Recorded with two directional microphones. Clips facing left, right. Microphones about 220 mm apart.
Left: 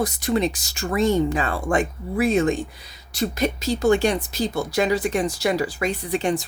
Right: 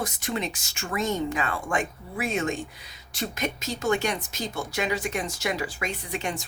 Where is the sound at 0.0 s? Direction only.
35° left (ahead or behind).